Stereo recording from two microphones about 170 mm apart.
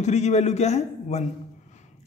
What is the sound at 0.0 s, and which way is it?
A man's voice, 40° left (ahead or behind).